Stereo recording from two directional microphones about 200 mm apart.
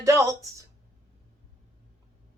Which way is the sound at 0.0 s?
15° right (ahead or behind).